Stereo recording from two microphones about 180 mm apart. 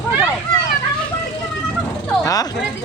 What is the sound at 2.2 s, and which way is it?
Speech, 20° left (ahead or behind).